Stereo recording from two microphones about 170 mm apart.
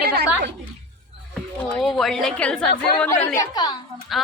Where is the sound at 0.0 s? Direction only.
75° right (ahead or behind).